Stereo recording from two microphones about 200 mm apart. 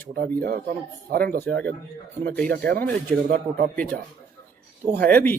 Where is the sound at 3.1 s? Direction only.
45° right (ahead or behind).